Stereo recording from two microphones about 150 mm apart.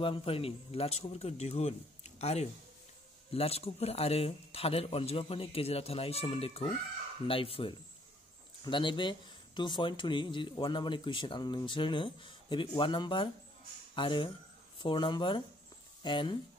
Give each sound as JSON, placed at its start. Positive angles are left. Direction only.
{"t": 0.0, "sound": "a man's voice", "side_deg": 35}